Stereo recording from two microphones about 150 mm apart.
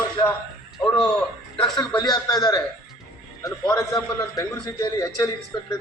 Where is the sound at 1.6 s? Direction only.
30° left (ahead or behind).